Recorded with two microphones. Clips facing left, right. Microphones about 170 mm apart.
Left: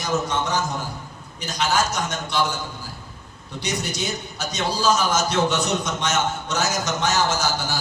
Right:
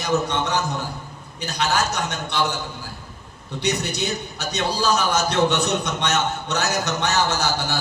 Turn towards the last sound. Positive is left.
turn(degrees=-60)  # may be behind; listen again after turning